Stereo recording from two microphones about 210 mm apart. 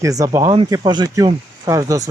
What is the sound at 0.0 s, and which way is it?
Speech, 15° right (ahead or behind).